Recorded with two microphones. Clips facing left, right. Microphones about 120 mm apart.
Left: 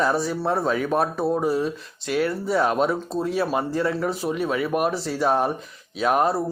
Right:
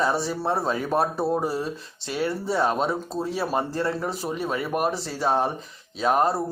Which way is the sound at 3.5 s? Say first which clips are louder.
Left 2 dB; centre (ahead or behind).